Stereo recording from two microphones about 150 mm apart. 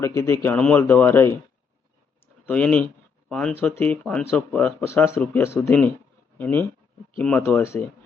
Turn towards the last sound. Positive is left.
turn(degrees=15)  # may be behind; listen again after turning